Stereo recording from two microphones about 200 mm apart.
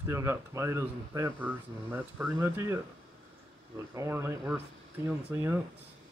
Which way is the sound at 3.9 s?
10° right (ahead or behind).